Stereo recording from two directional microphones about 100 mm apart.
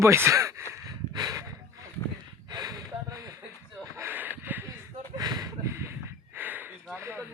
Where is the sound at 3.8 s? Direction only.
25° right (ahead or behind).